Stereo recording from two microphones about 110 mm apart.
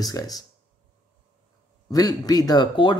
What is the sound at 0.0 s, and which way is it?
Speech, 35° left (ahead or behind).